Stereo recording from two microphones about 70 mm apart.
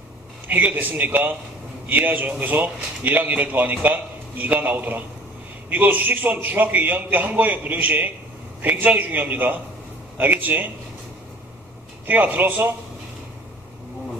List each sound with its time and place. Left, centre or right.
0.4 s a man's voice: right
12.0 s a man's voice: right